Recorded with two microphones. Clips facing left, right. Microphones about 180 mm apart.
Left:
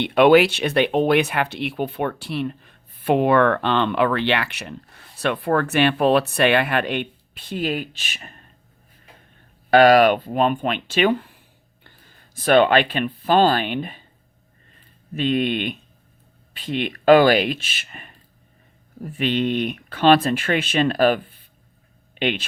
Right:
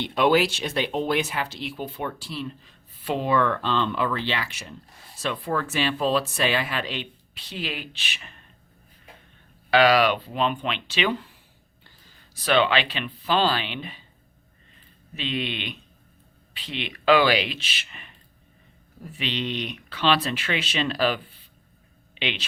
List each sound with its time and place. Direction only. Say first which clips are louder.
0.0 s speech: left 7 dB; 65° left (ahead or behind); by 8.4 s 45° left (ahead or behind)
9.6 s speech: left 6 dB; 50° left (ahead or behind)
15.1 s speech: left 9 dB; 50° left (ahead or behind)